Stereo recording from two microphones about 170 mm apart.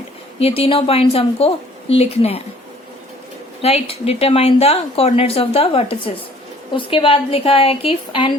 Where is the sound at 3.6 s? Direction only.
35° left (ahead or behind).